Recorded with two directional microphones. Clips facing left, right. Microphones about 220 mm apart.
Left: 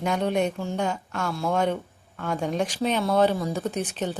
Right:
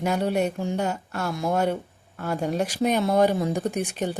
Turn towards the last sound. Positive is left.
turn(degrees=-10)  # may be behind; listen again after turning